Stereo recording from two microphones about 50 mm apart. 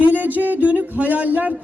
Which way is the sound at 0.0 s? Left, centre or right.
Right.